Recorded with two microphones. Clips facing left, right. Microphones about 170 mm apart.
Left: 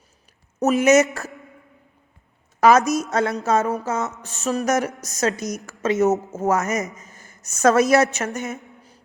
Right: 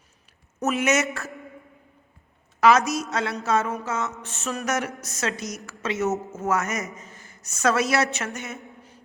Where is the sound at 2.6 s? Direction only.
45° left (ahead or behind).